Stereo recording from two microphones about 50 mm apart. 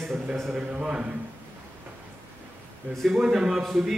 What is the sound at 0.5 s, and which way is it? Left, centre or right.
Speech, right.